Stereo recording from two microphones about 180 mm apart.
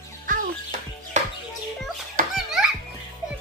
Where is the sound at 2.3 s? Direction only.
5° right (ahead or behind).